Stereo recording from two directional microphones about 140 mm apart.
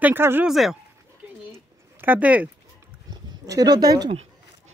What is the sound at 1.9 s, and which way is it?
Speech, 15° right (ahead or behind).